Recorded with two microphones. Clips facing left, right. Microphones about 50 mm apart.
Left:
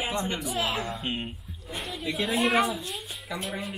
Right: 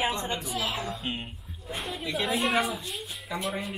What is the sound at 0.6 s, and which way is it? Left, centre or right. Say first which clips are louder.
Speech: left 2 dB; left.